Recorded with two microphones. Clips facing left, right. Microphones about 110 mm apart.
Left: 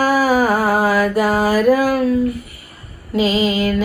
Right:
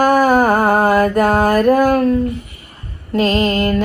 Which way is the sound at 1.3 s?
55° right (ahead or behind).